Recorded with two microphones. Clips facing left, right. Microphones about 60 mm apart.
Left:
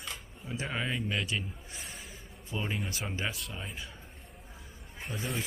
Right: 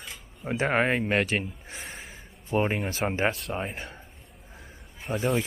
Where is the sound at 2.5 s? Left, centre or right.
Right.